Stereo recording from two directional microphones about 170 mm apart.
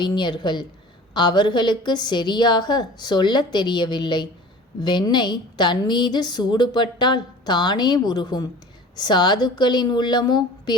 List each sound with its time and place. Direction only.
0.0 s a woman's voice: 25° left (ahead or behind)